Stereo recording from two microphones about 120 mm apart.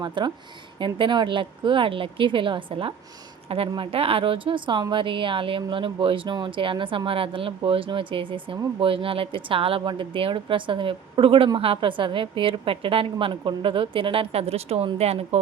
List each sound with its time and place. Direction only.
0.0 s speech: 40° right (ahead or behind); by 15.4 s 60° right (ahead or behind)